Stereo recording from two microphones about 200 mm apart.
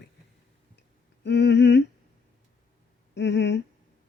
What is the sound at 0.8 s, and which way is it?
Humming, 60° left (ahead or behind).